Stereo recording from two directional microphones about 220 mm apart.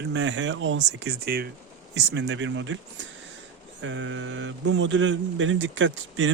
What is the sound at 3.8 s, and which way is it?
Speech, 55° right (ahead or behind).